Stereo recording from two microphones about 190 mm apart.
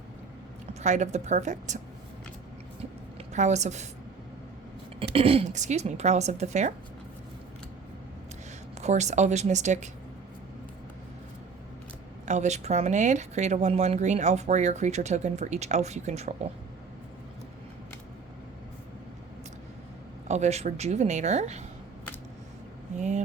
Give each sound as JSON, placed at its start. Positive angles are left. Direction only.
{"t": 0.7, "sound": "speech", "side_deg": -35}
{"t": 3.2, "sound": "a woman's voice", "side_deg": -35}
{"t": 5.1, "sound": "speech", "side_deg": -30}
{"t": 8.8, "sound": "speech", "side_deg": -35}
{"t": 12.2, "sound": "speech", "side_deg": -40}
{"t": 20.2, "sound": "speech", "side_deg": -35}
{"t": 23.0, "sound": "speech", "side_deg": -40}